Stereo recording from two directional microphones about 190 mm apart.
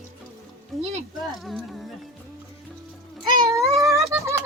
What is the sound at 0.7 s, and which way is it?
Speech, centre (ahead or behind).